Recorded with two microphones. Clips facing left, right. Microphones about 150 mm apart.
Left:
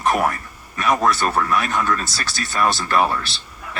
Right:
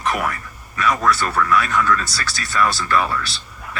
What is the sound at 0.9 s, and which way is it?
Speech, 25° left (ahead or behind).